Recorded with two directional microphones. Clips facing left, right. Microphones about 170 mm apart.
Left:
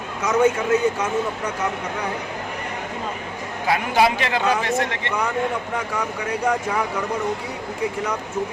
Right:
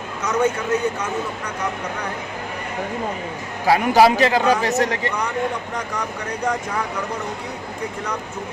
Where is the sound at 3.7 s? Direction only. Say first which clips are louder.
Right 5 dB; 35° right (ahead or behind).